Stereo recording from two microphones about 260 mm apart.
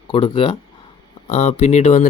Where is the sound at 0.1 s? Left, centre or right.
Centre.